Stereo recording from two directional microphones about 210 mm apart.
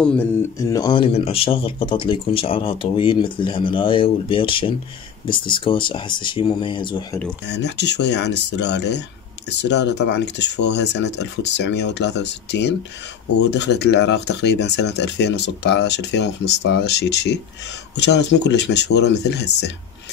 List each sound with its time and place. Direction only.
0.6 s speech: 15° left (ahead or behind)
7.4 s speech: 55° left (ahead or behind)